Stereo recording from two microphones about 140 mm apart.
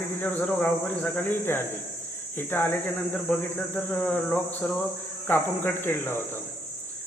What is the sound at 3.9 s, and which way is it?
Speech, 10° left (ahead or behind).